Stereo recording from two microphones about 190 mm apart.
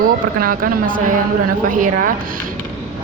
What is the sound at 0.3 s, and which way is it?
Speech, 50° right (ahead or behind).